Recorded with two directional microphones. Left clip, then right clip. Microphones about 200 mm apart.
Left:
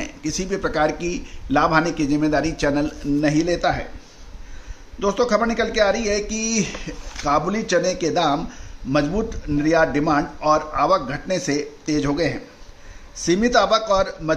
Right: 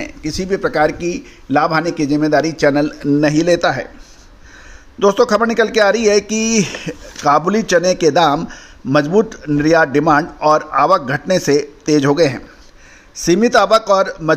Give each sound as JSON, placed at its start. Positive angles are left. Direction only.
{"t": 0.0, "sound": "speech", "side_deg": -25}
{"t": 3.2, "sound": "a man's voice", "side_deg": -50}
{"t": 4.9, "sound": "a man's voice", "side_deg": -45}